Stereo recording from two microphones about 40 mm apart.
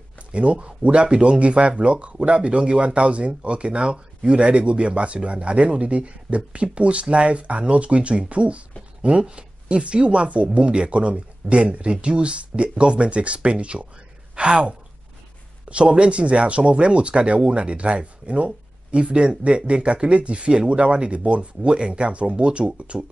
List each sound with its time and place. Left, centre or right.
0.3 s speech: right